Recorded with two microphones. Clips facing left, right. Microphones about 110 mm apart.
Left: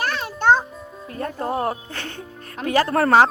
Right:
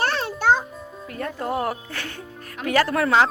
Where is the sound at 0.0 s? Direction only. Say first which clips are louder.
Right 2 dB; 30° right (ahead or behind).